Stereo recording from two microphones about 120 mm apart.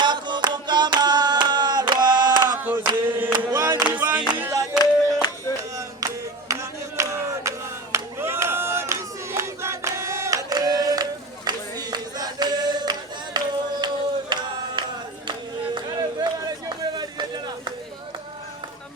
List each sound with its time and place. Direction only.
0.0 s music: 40° right (ahead or behind)
2.6 s chant: 15° right (ahead or behind)
3.5 s a sound: 30° right (ahead or behind)
3.8 s music: 10° right (ahead or behind)
4.8 s music: 30° left (ahead or behind)
6.5 s a sound: 25° right (ahead or behind)
7.9 s crowd: 20° right (ahead or behind)
11.4 s choir: 35° right (ahead or behind)
14.8 s a sound: 40° right (ahead or behind)